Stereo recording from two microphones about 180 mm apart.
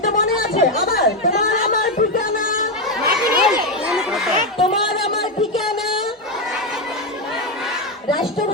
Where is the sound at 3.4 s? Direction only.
5° right (ahead or behind).